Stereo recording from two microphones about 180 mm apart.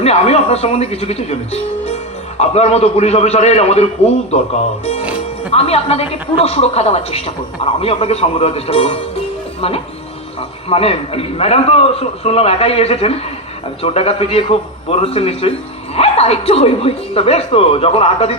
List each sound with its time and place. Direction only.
0.0 s a woman's voice: 35° left (ahead or behind)
5.5 s a woman's voice: 35° left (ahead or behind)